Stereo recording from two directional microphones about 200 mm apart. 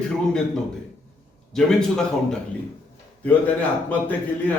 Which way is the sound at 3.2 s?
5° left (ahead or behind).